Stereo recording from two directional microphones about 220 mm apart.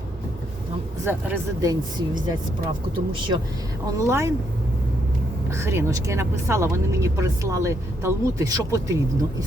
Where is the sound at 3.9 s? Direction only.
15° right (ahead or behind).